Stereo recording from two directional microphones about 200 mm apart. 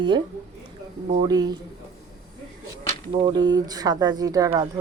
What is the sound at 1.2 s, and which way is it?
Speech, 20° right (ahead or behind).